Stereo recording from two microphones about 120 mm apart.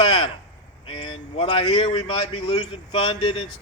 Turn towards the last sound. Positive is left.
turn(degrees=45)  # may be behind; listen again after turning